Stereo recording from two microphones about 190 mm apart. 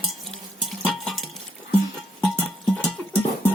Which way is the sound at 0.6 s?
Centre (ahead or behind).